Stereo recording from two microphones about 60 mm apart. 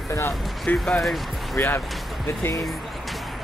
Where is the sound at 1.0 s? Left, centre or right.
Centre.